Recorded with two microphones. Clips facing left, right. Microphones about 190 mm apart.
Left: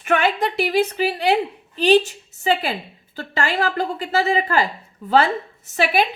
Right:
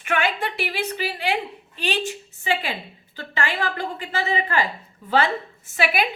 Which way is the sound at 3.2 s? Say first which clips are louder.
Left 4 dB; 40° left (ahead or behind).